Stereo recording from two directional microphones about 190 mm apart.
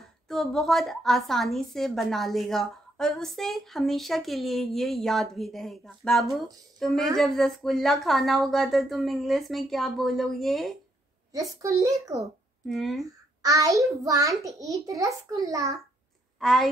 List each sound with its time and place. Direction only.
0.0 s a woman's voice: centre (ahead or behind)
11.3 s a child's voice: 15° right (ahead or behind)
12.6 s a woman's voice: centre (ahead or behind)
13.4 s a child's voice: 15° right (ahead or behind)
16.3 s a woman's voice: centre (ahead or behind)